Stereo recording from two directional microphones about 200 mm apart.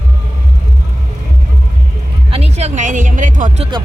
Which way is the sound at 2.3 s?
30° right (ahead or behind).